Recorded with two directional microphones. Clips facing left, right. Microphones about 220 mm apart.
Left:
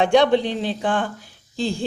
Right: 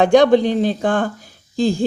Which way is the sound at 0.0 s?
45° right (ahead or behind).